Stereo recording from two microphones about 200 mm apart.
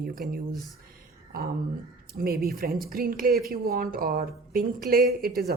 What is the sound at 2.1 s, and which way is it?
A woman's voice, 50° right (ahead or behind).